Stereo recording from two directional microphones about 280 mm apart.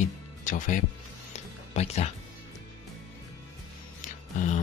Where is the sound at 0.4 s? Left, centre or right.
Left.